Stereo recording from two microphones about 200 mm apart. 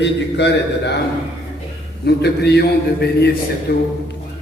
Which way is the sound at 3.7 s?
50° left (ahead or behind).